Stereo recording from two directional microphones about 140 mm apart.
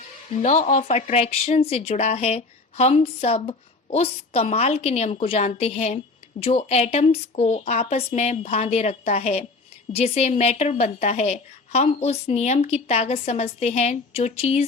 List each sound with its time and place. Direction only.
0.3 s speech: 55° left (ahead or behind)